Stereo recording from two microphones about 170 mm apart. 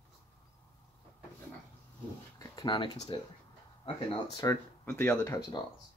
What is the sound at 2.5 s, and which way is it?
Speech, 25° left (ahead or behind).